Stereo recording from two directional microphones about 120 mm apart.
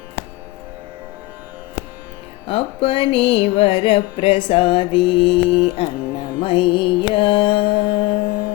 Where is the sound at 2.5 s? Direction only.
50° left (ahead or behind).